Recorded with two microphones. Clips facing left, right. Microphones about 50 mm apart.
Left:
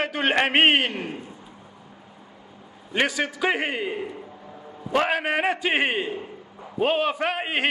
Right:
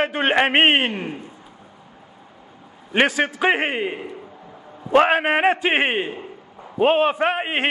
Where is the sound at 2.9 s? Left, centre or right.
Right.